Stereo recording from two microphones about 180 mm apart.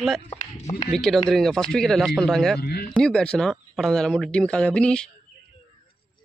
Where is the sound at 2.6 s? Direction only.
60° left (ahead or behind).